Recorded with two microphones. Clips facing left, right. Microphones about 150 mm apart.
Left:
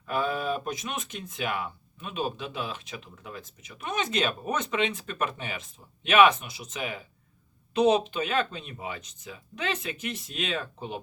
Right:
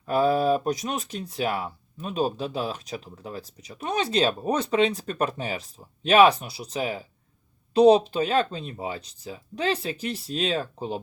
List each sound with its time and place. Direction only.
0.0 s speech: 35° right (ahead or behind)